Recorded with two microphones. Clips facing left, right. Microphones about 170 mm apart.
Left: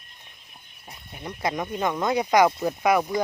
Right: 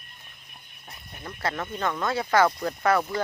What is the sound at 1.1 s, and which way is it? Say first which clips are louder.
Speech: left 3 dB; 15° left (ahead or behind).